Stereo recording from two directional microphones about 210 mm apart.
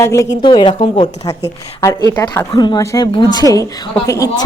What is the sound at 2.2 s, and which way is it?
A woman's voice, 20° left (ahead or behind).